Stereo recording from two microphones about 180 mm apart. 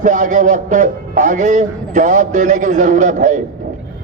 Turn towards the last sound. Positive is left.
turn(degrees=-45)  # may be behind; listen again after turning